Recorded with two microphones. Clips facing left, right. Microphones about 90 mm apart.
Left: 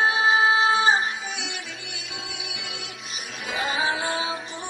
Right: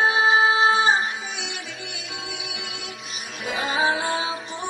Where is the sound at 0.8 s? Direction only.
40° right (ahead or behind).